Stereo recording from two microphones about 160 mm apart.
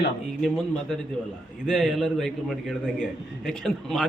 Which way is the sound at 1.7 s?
Centre (ahead or behind).